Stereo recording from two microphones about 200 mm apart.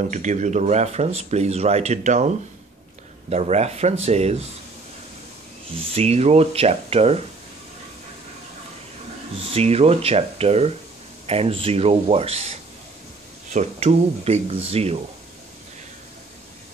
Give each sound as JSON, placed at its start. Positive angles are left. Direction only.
{"t": 0.1, "sound": "speech", "side_deg": -35}
{"t": 5.9, "sound": "speech", "side_deg": -30}
{"t": 9.5, "sound": "speech", "side_deg": -30}